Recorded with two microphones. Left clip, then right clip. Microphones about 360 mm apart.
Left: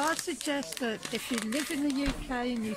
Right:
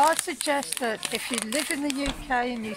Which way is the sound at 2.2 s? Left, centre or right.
Centre.